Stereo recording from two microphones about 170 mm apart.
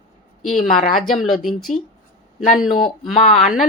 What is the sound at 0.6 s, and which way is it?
Speech, 55° left (ahead or behind).